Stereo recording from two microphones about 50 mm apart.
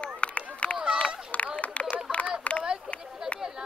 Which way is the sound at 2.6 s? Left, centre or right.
Centre.